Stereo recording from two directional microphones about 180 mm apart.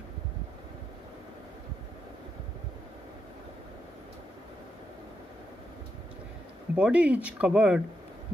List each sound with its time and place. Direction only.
6.7 s speech: 5° right (ahead or behind)